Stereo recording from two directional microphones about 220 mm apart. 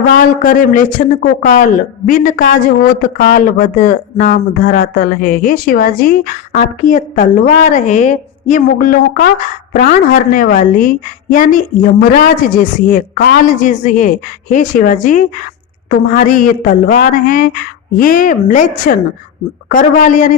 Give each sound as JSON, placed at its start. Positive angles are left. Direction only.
{"t": 0.2, "sound": "speech", "side_deg": 35}